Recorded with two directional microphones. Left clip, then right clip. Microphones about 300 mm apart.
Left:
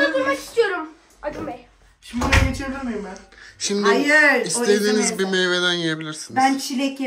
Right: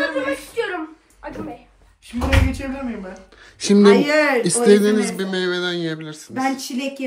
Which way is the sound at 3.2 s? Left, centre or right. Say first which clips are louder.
Even; centre.